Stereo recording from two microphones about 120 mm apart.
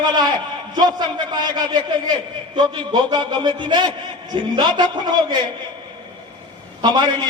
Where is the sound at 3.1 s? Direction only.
40° right (ahead or behind).